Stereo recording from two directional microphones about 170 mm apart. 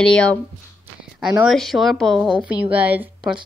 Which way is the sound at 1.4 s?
Centre (ahead or behind).